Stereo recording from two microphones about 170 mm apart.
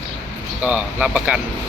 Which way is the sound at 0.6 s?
10° right (ahead or behind).